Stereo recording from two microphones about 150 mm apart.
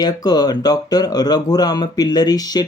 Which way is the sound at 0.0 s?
25° left (ahead or behind).